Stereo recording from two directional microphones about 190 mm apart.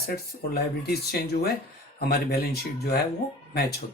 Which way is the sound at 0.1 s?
55° left (ahead or behind).